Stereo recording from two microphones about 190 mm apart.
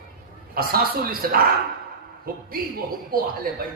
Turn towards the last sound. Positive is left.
turn(degrees=-50)  # may be behind; listen again after turning